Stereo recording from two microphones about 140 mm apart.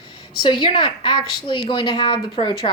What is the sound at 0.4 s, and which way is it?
A woman's voice, 35° left (ahead or behind).